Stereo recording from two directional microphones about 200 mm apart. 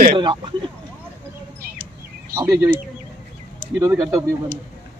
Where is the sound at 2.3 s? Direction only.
15° right (ahead or behind).